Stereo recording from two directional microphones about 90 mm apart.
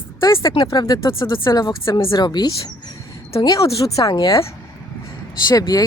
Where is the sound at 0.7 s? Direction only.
50° left (ahead or behind).